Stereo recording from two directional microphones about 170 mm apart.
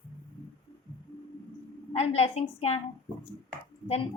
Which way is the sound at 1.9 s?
35° left (ahead or behind).